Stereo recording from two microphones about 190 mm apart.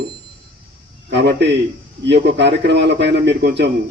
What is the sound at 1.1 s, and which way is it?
Speech, 65° right (ahead or behind).